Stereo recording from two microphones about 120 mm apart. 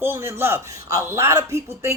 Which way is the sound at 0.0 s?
20° right (ahead or behind).